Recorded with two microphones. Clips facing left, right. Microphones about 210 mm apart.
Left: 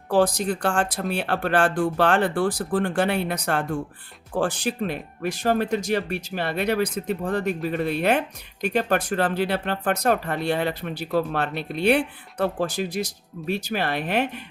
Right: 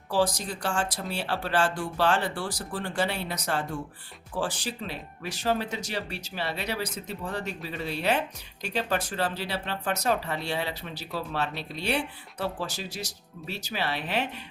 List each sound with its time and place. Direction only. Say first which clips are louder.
0.1 s speech: left 6 dB; 55° left (ahead or behind)